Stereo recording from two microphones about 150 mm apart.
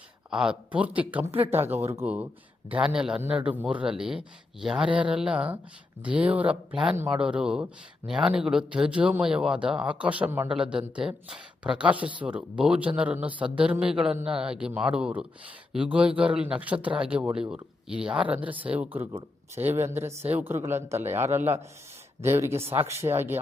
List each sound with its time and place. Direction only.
0.3 s a man's voice: 5° right (ahead or behind)